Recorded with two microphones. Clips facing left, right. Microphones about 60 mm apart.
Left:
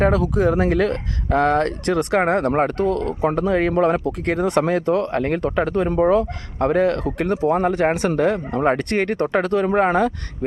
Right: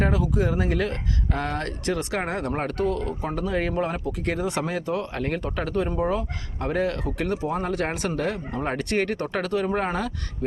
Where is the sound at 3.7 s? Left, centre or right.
Left.